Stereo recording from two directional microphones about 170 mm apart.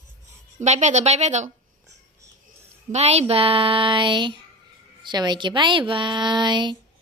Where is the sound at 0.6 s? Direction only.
45° right (ahead or behind).